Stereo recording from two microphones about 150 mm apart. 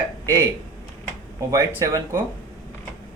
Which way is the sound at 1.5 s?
25° right (ahead or behind).